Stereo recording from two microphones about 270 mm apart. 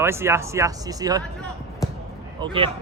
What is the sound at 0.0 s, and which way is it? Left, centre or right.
Speech, centre.